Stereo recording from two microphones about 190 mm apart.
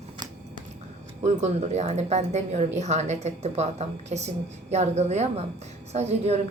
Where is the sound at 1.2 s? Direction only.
35° right (ahead or behind).